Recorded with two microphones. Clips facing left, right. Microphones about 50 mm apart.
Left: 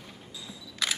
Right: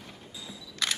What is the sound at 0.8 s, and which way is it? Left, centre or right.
Single-lens reflex camera, centre.